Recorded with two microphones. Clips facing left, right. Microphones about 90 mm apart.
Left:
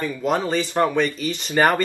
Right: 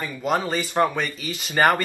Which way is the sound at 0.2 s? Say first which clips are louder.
Left 1 dB; 5° right (ahead or behind).